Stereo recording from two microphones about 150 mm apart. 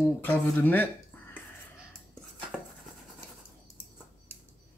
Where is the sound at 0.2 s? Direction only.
15° left (ahead or behind).